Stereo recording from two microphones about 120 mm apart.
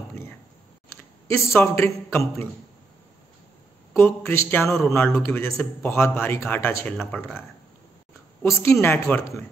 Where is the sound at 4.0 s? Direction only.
20° left (ahead or behind).